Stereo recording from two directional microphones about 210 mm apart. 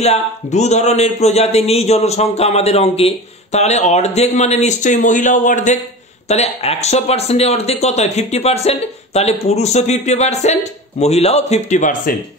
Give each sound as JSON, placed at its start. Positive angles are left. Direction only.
{"t": 0.0, "sound": "speech", "side_deg": 30}